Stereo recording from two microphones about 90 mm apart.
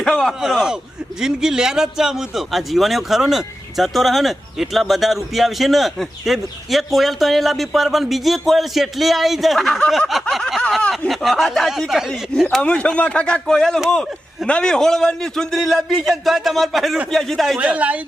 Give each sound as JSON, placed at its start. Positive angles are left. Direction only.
{"t": 0.0, "sound": "speech", "side_deg": 5}
{"t": 0.4, "sound": "speech", "side_deg": -5}
{"t": 12.6, "sound": "speech", "side_deg": 10}
{"t": 17.6, "sound": "speech", "side_deg": -15}